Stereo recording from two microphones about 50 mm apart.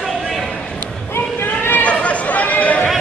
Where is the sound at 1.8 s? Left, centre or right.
Left.